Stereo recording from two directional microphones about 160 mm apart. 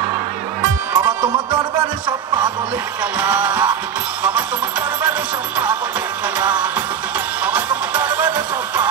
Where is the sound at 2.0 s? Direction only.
30° right (ahead or behind).